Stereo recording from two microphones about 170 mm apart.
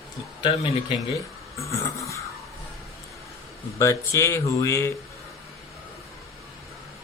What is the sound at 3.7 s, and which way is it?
Speech, 15° left (ahead or behind).